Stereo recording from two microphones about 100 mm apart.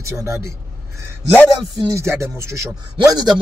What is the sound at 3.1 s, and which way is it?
Speech, 45° right (ahead or behind).